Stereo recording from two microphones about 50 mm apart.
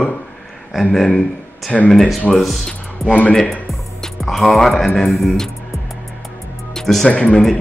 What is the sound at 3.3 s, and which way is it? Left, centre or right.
Speech, centre.